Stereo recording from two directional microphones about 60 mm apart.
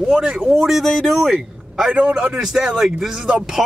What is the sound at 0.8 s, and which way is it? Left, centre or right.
A man's voice, centre.